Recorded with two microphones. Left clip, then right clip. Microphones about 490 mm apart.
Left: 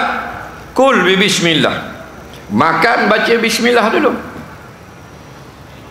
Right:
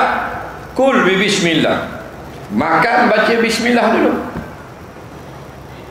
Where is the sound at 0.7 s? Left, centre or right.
Left.